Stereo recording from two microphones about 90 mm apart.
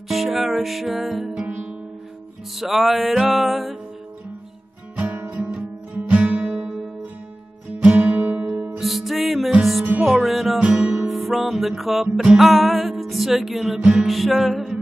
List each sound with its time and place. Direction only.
0.1 s music: centre (ahead or behind)
2.5 s music: centre (ahead or behind)
4.9 s guitar: 20° right (ahead or behind)
7.8 s guitar: 15° right (ahead or behind)
8.7 s music: centre (ahead or behind)